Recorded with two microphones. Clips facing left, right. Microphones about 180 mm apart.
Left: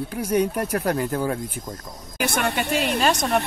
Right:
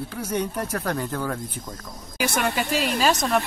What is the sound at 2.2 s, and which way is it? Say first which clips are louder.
Speech: even; 60° left (ahead or behind).